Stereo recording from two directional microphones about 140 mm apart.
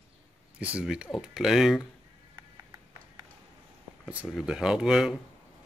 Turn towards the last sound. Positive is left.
turn(degrees=-5)  # may be behind; listen again after turning